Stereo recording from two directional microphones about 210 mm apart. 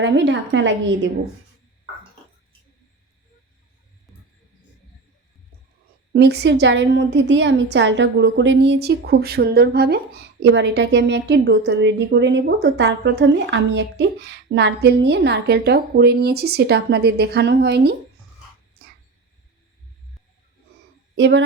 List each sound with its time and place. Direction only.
0.0 s a woman's voice: 60° right (ahead or behind)
6.1 s a woman's voice: 50° right (ahead or behind)
18.8 s a sound: 50° right (ahead or behind)
21.2 s a woman's voice: 55° right (ahead or behind)